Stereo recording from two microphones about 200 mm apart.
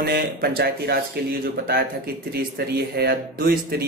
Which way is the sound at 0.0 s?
50° right (ahead or behind).